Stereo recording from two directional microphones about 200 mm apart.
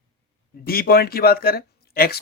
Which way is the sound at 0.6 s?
50° left (ahead or behind).